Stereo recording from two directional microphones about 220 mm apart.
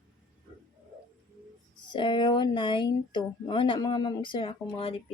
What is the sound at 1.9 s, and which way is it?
Speech, 20° left (ahead or behind).